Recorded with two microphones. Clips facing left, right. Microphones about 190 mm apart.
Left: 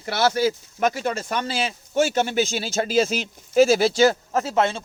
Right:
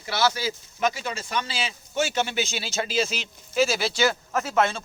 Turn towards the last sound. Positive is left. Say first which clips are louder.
# left 2 dB
turn(degrees=30)  # may be behind; listen again after turning